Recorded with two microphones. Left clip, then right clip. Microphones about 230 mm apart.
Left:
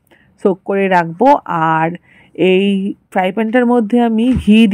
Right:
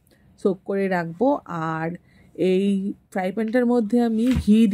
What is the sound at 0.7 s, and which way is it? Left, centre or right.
Speech, centre.